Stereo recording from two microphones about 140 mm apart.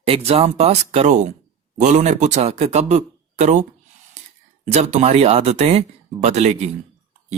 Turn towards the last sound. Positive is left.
turn(degrees=-50)  # may be behind; listen again after turning